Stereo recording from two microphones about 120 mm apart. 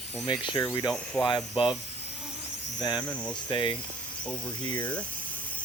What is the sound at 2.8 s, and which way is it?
Speech, 35° left (ahead or behind).